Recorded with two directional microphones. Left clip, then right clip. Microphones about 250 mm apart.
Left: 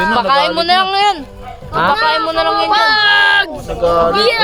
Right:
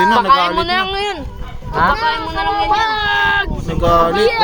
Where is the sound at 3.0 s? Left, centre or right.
Left.